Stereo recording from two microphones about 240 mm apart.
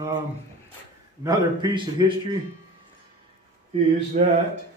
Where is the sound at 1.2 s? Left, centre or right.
Centre.